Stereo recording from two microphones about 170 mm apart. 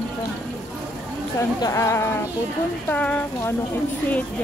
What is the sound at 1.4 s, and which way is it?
Speech, 20° left (ahead or behind).